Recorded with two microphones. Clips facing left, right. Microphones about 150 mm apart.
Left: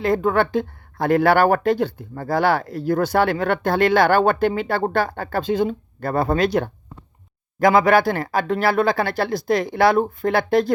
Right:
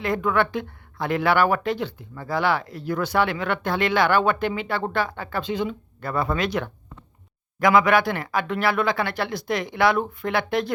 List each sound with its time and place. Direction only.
0.0 s speech: 30° left (ahead or behind)